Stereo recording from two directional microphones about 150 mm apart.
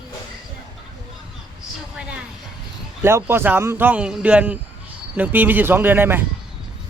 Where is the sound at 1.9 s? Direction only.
5° right (ahead or behind).